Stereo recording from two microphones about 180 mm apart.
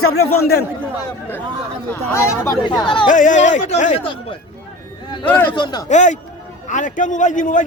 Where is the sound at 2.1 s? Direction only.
15° left (ahead or behind).